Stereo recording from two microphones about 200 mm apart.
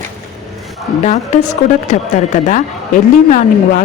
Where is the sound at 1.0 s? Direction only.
35° left (ahead or behind).